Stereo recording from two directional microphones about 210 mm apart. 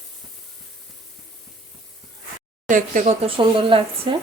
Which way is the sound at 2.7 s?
35° right (ahead or behind).